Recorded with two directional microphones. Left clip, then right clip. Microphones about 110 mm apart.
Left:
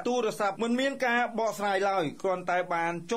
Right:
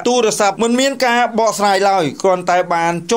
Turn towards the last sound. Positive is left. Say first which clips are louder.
# right 14 dB
turn(degrees=-30)  # may be behind; listen again after turning